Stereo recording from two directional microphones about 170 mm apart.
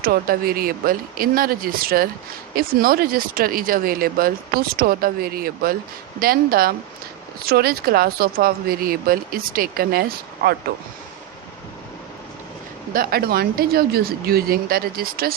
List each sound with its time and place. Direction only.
0.0 s speech: 60° right (ahead or behind)
12.9 s speech: 60° right (ahead or behind)